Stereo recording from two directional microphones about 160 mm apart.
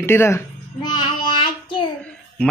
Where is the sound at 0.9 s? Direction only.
30° left (ahead or behind).